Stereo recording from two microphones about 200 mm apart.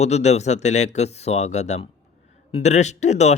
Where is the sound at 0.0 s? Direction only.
35° left (ahead or behind).